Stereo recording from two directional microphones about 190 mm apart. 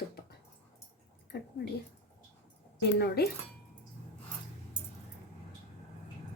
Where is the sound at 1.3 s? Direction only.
65° left (ahead or behind).